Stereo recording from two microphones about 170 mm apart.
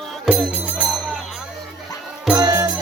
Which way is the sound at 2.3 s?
20° right (ahead or behind).